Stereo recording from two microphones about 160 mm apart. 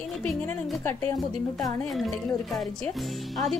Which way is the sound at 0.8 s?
20° left (ahead or behind).